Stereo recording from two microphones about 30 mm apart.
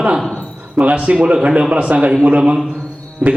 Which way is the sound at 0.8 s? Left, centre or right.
Right.